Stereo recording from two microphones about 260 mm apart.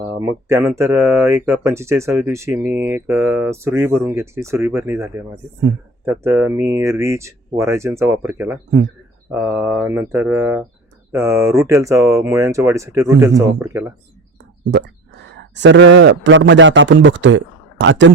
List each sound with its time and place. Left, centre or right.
0.2 s speech: centre
14.6 s a man's voice: right